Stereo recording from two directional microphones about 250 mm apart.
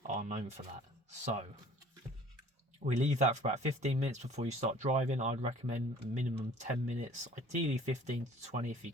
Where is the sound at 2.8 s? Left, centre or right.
Right.